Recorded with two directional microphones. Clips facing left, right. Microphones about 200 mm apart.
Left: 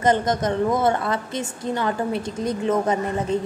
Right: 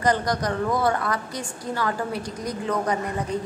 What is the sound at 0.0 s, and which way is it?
A woman's voice, 20° left (ahead or behind).